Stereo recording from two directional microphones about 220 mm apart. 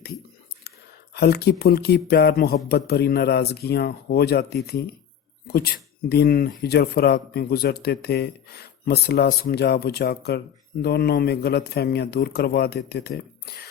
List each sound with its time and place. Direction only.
1.1 s speech: 45° left (ahead or behind)